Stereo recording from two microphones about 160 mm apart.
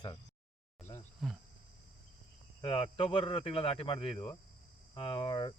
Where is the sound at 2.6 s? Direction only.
35° left (ahead or behind).